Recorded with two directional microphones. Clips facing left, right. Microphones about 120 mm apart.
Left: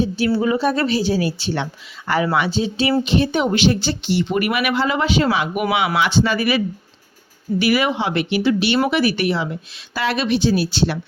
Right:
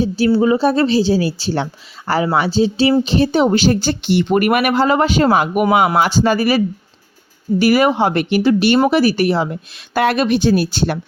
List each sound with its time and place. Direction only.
0.3 s a woman's voice: 30° right (ahead or behind)
7.6 s speech: 40° right (ahead or behind)